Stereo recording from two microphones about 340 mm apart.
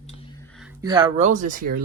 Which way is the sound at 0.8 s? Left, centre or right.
Centre.